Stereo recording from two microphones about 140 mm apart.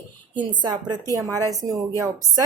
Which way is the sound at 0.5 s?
30° right (ahead or behind).